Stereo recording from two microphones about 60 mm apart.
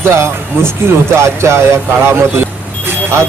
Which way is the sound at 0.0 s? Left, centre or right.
Right.